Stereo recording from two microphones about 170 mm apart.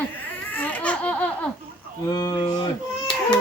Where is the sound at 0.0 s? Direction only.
10° left (ahead or behind).